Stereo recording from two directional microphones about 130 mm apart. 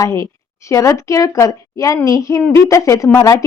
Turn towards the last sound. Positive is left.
turn(degrees=25)  # may be behind; listen again after turning